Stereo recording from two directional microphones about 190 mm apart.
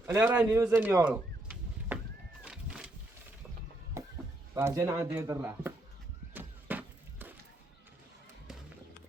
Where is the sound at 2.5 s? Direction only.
5° right (ahead or behind).